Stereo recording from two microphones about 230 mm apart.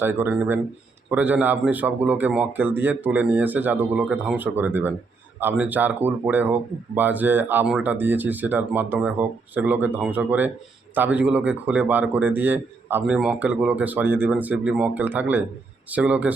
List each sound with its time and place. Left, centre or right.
0.0 s speech: centre